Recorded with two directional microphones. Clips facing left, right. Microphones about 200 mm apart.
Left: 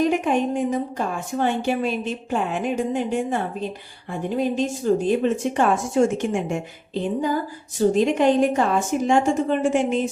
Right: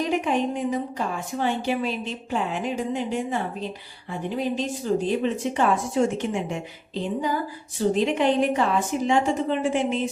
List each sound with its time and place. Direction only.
0.0 s a woman's voice: 50° left (ahead or behind)